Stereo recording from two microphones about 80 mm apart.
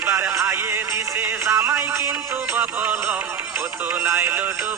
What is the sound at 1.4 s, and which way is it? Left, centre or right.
Speech, right.